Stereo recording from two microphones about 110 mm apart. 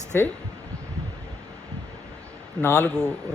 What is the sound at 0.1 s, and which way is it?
Speech, 20° left (ahead or behind).